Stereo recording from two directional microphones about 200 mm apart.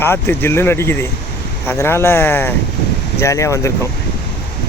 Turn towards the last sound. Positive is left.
turn(degrees=15)  # may be behind; listen again after turning